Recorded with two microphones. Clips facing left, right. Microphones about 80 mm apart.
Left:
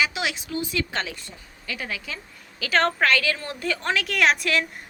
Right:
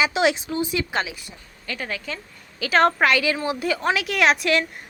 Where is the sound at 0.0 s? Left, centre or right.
Right.